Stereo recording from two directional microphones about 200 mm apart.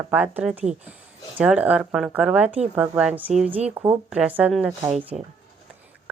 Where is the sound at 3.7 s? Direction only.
20° right (ahead or behind).